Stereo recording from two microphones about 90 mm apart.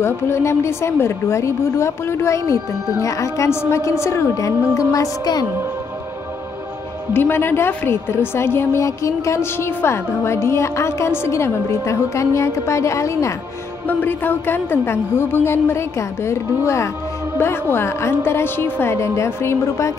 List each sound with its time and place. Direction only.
0.0 s a woman's voice: 30° left (ahead or behind); by 5.5 s 45° left (ahead or behind)
7.2 s a woman's voice: 25° left (ahead or behind)
13.8 s a woman's voice: 25° left (ahead or behind)